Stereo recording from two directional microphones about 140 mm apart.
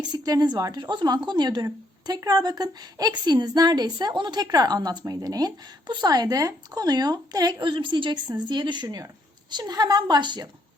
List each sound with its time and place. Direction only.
0.0 s a woman's voice: 30° right (ahead or behind)